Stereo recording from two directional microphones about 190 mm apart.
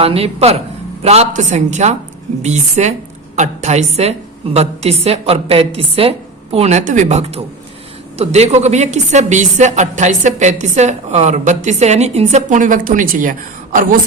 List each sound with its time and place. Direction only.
0.0 s a woman's voice: 30° right (ahead or behind)